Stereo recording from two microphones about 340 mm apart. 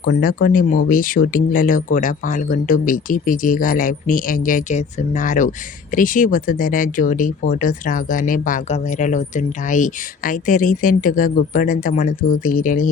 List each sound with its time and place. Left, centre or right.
0.0 s speech: left